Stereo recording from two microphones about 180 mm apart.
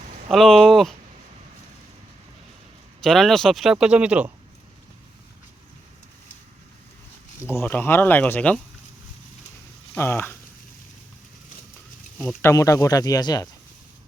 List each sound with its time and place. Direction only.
0.3 s speech: centre (ahead or behind)
3.0 s speech: centre (ahead or behind)
7.5 s speech: 10° left (ahead or behind)
9.9 s speech: 10° left (ahead or behind)
12.4 s speech: 15° left (ahead or behind)